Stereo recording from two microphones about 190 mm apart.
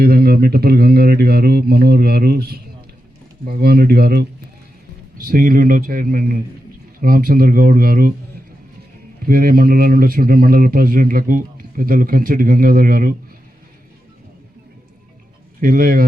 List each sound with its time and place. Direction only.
0.0 s a man's voice: 55° right (ahead or behind)
3.6 s a man's voice: 55° right (ahead or behind)
9.2 s a man's voice: 50° right (ahead or behind)
15.6 s a man's voice: 50° right (ahead or behind)